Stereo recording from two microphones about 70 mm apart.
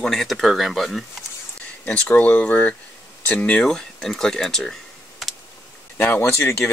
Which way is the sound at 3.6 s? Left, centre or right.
Centre.